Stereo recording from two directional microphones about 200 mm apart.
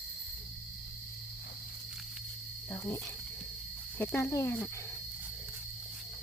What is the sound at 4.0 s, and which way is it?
Speech, 5° left (ahead or behind).